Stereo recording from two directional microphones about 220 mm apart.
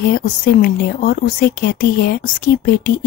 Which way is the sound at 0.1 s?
40° left (ahead or behind).